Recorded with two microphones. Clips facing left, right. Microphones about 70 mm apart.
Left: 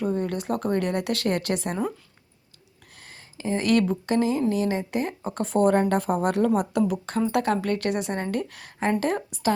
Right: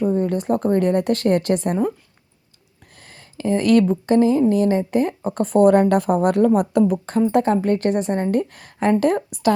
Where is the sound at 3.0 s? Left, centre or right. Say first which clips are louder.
Right 7 dB; right.